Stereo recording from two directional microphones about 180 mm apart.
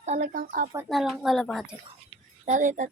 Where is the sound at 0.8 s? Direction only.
Centre (ahead or behind).